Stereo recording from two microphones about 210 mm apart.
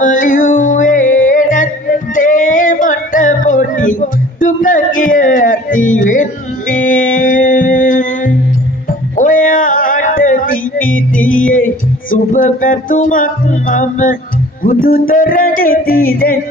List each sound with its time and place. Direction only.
0.0 s music: 35° left (ahead or behind)
2.1 s female singing: 40° left (ahead or behind)
6.7 s music: 40° left (ahead or behind)
9.1 s a sound: 40° left (ahead or behind)